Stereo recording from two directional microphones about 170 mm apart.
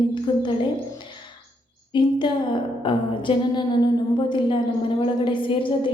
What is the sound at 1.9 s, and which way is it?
A woman's voice, 25° left (ahead or behind).